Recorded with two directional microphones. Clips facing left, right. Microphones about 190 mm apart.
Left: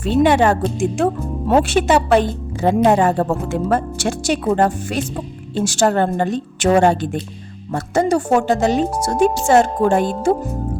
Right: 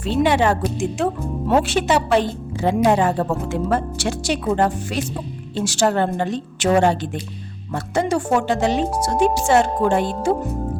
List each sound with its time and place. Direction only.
0.0 s speech: 50° left (ahead or behind)